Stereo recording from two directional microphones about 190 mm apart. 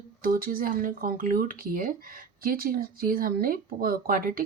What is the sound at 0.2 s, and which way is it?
Speech, 45° right (ahead or behind).